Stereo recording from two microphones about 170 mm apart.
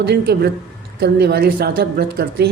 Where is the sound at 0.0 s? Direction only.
70° right (ahead or behind).